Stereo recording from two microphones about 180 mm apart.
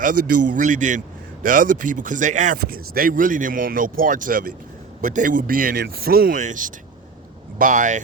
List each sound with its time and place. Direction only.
0.0 s a man's voice: 50° right (ahead or behind)